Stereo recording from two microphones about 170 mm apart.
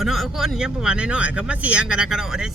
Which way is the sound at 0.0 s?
Centre (ahead or behind).